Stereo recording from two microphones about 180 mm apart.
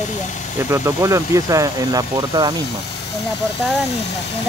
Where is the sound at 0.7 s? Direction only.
15° right (ahead or behind).